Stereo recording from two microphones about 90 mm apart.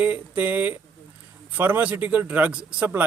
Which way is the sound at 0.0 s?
15° right (ahead or behind).